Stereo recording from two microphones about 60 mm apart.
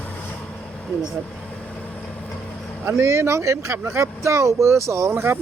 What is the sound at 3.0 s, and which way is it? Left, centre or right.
Speech, right.